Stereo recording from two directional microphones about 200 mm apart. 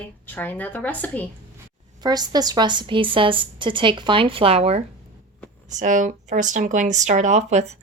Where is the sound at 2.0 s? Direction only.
20° right (ahead or behind).